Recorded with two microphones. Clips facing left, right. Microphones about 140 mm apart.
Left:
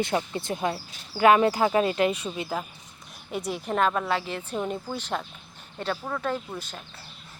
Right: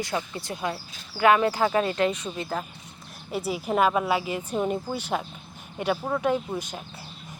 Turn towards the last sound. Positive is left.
turn(degrees=-15)  # may be behind; listen again after turning